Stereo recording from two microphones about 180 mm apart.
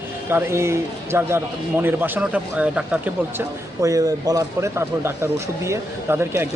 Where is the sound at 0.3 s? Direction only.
15° right (ahead or behind).